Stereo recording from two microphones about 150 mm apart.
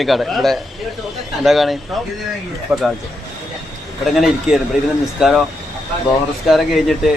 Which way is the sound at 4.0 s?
Centre (ahead or behind).